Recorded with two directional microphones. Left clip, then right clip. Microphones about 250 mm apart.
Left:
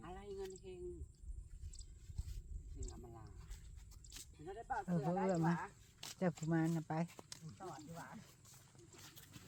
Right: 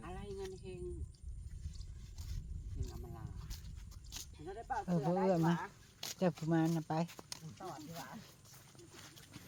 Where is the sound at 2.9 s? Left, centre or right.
Centre.